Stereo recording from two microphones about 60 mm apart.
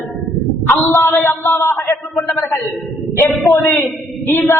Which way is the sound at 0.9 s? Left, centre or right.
Left.